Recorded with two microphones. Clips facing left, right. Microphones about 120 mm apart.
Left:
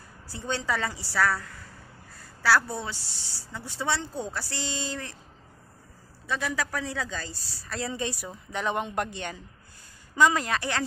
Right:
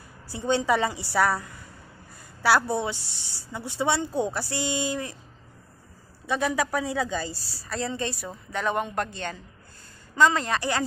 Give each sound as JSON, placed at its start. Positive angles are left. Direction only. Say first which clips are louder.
{"t": 0.3, "sound": "speech", "louder": "right 7 dB", "side_deg": -15}
{"t": 2.1, "sound": "a sound", "louder": "right 2 dB", "side_deg": -15}
{"t": 2.7, "sound": "speech", "louder": "right 7 dB", "side_deg": -15}
{"t": 6.2, "sound": "speech", "louder": "right 5 dB", "side_deg": -20}
{"t": 7.6, "sound": "a woman's voice", "louder": "right 3 dB", "side_deg": 0}
{"t": 7.9, "sound": "a woman's voice", "louder": "right 2 dB", "side_deg": 15}